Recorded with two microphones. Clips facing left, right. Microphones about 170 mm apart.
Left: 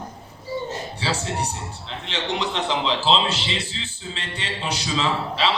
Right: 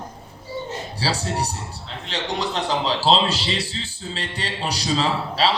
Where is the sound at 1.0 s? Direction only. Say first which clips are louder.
Right 2 dB; 35° right (ahead or behind).